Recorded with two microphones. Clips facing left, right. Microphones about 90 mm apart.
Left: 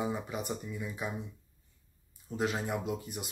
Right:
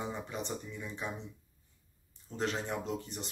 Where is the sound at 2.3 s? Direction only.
10° left (ahead or behind).